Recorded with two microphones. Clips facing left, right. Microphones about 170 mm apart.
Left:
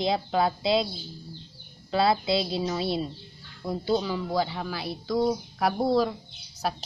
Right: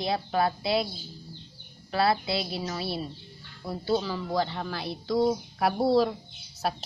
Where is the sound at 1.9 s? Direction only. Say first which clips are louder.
Left 2 dB; 20° left (ahead or behind); by 6.8 s centre (ahead or behind).